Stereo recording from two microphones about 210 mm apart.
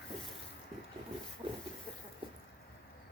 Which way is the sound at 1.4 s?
25° right (ahead or behind).